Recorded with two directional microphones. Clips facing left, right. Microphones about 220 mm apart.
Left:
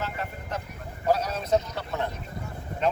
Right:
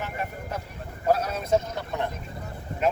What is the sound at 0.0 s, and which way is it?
Vehicle, 15° right (ahead or behind).